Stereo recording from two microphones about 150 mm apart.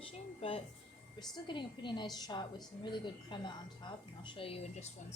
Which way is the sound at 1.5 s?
30° left (ahead or behind).